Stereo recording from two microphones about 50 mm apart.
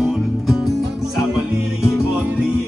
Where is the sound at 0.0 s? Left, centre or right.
Centre.